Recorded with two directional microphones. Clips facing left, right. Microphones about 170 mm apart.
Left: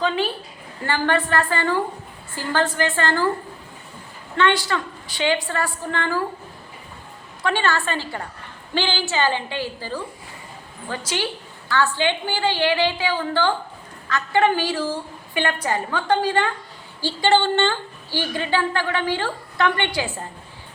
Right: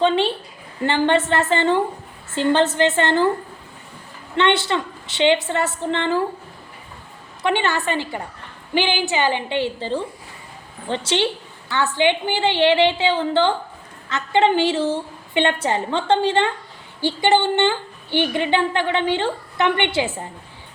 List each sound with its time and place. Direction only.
0.0 s a woman's voice: 25° right (ahead or behind)
4.4 s a woman's voice: 25° right (ahead or behind)
7.4 s a woman's voice: 20° right (ahead or behind)